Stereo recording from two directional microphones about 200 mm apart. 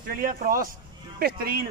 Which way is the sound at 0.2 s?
45° right (ahead or behind).